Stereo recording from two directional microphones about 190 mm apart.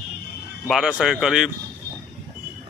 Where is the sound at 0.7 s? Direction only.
5° right (ahead or behind).